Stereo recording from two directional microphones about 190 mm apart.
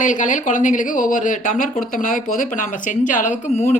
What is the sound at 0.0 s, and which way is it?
A man's voice, 40° left (ahead or behind).